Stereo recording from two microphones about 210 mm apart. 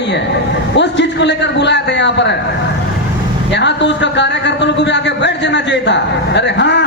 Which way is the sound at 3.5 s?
55° left (ahead or behind).